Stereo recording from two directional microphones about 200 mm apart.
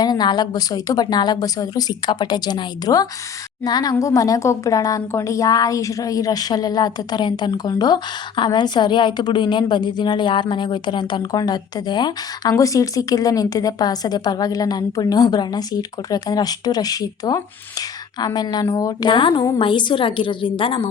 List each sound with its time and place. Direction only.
0.0 s a woman's voice: 20° left (ahead or behind)